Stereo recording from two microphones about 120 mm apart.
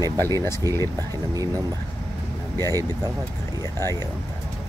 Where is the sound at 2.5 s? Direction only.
30° right (ahead or behind).